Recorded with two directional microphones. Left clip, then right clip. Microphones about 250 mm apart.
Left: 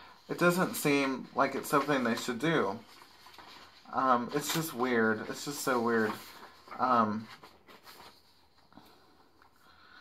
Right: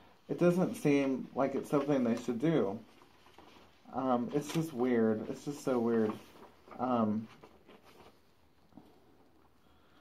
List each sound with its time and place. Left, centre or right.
0.3 s speech: left
3.9 s speech: left